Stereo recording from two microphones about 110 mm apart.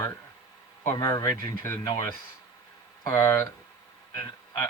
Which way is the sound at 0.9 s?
30° left (ahead or behind).